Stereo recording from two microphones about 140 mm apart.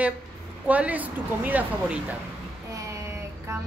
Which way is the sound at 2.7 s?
20° right (ahead or behind).